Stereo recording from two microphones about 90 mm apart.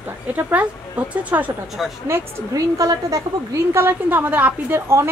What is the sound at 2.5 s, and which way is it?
A woman's voice, 40° right (ahead or behind).